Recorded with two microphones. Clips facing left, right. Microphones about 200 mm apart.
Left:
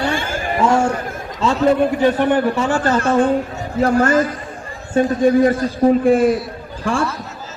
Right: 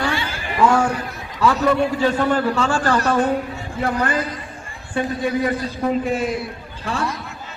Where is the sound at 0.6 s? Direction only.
25° left (ahead or behind).